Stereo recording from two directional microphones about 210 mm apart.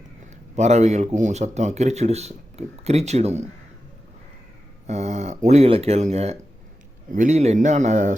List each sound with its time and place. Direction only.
0.5 s speech: 30° right (ahead or behind)
4.9 s speech: 35° right (ahead or behind)